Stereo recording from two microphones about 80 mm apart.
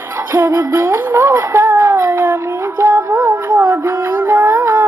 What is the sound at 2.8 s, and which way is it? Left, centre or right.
Music, right.